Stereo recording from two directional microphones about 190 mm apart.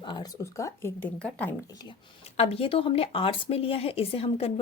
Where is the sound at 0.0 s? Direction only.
20° left (ahead or behind).